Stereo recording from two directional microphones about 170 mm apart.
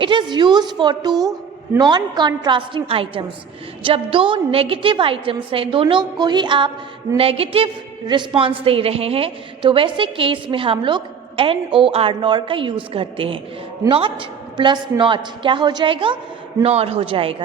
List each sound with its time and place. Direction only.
0.0 s a woman's voice: 25° right (ahead or behind)